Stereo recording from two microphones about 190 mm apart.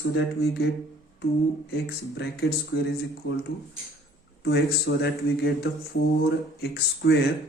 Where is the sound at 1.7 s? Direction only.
60° left (ahead or behind).